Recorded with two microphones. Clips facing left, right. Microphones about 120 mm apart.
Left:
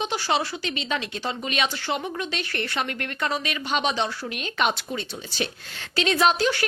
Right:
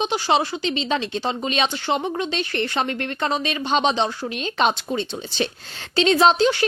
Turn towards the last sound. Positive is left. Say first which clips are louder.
# right 5 dB
turn(degrees=-20)  # may be behind; listen again after turning